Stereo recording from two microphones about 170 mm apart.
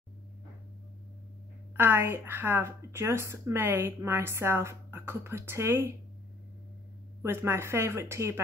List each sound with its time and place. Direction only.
1.8 s speech: 10° right (ahead or behind)
7.2 s speech: 15° right (ahead or behind)